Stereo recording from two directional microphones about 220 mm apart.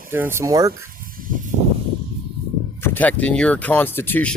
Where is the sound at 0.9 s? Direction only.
40° right (ahead or behind).